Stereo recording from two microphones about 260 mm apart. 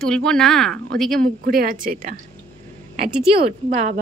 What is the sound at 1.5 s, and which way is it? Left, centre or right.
Speech, right.